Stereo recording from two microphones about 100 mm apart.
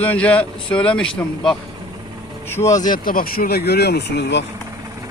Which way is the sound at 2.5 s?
30° left (ahead or behind).